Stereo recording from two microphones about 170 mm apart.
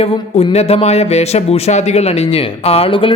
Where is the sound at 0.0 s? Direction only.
35° left (ahead or behind).